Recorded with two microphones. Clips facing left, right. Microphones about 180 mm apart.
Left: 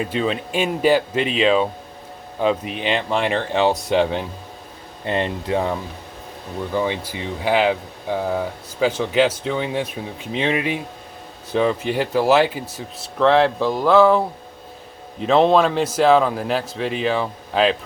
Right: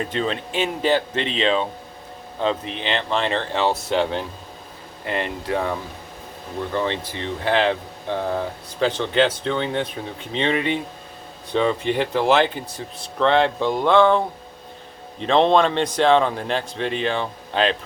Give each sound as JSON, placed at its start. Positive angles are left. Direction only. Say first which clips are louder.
{"t": 0.0, "sound": "speech", "louder": "left 2 dB", "side_deg": 5}
{"t": 6.7, "sound": "speech", "louder": "left 2 dB", "side_deg": 10}